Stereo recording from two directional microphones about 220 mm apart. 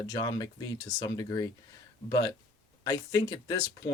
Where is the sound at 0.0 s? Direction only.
15° left (ahead or behind).